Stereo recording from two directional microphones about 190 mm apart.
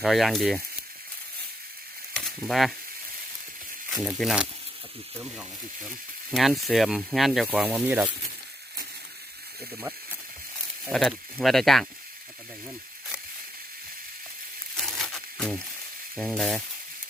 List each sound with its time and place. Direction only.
0.0 s speech: centre (ahead or behind)
2.1 s a sound: centre (ahead or behind)
3.9 s speech: centre (ahead or behind)
10.8 s speech: centre (ahead or behind)
14.8 s a sound: centre (ahead or behind)
16.1 s speech: centre (ahead or behind)